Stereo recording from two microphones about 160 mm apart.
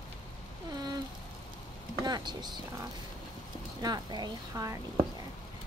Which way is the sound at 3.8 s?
25° right (ahead or behind).